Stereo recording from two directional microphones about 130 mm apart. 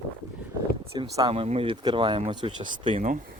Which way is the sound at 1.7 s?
35° right (ahead or behind).